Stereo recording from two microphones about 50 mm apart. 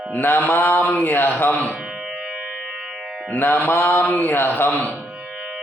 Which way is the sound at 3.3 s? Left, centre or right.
Left.